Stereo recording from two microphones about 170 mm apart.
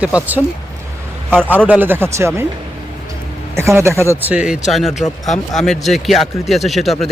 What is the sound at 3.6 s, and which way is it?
Speech, 15° right (ahead or behind).